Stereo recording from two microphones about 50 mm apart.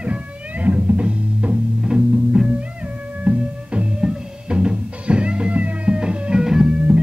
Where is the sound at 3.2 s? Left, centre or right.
Right.